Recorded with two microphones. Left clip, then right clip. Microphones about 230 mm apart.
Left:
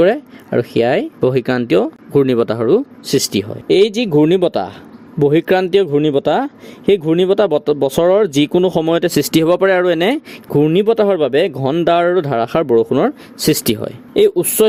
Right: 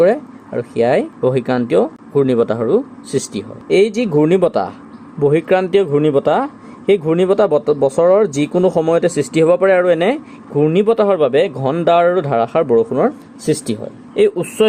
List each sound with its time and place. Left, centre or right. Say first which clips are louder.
0.1 s speech: left 1 dB; left
1.3 s speech: even; left
3.7 s speech: left 1 dB; left
14.1 s speech: left 2 dB; left